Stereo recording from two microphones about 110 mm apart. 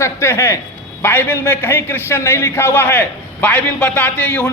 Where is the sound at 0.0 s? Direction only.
25° left (ahead or behind).